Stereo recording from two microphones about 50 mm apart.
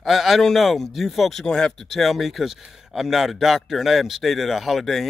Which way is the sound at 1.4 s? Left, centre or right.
Centre.